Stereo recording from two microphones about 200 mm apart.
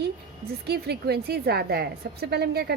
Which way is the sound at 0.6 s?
55° right (ahead or behind).